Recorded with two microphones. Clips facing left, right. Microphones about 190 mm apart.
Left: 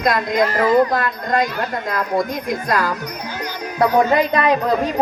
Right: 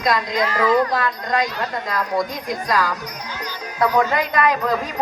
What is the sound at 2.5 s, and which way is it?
Speech, 55° left (ahead or behind).